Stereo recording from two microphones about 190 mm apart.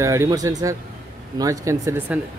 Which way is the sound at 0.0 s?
15° right (ahead or behind).